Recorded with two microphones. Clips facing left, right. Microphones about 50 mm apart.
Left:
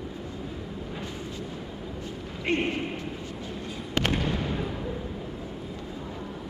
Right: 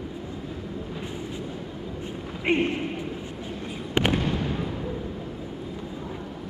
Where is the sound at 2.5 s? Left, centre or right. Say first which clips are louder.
Right 4 dB; centre.